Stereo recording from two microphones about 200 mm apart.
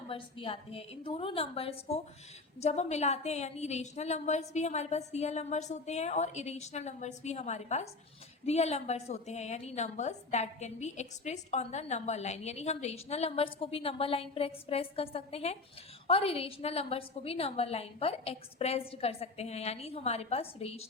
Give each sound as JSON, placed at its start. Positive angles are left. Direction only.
{"t": 0.1, "sound": "a woman's voice", "side_deg": 25}